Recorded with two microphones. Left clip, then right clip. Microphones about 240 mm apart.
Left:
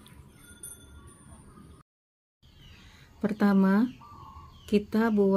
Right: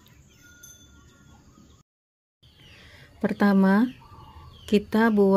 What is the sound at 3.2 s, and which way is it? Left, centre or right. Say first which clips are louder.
Speech: right 4 dB; centre.